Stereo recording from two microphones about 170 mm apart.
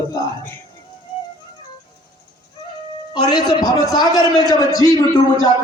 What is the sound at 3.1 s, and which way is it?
A man's voice, 25° left (ahead or behind).